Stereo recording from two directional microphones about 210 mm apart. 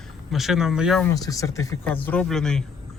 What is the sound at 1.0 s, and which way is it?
Speech, 15° left (ahead or behind).